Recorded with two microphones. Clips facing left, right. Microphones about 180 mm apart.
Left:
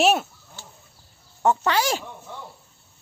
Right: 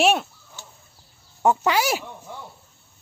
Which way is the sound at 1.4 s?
10° right (ahead or behind).